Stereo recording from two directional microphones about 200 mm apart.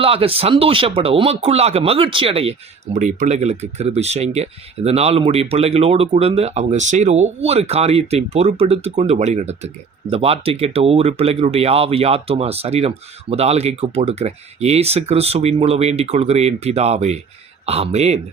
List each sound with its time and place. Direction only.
0.0 s speech: 30° right (ahead or behind)